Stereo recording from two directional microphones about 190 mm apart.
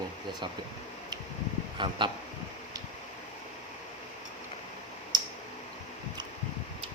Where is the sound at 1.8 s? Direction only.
25° right (ahead or behind).